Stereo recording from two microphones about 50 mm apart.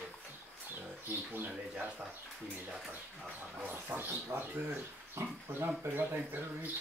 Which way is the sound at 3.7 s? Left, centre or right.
Right.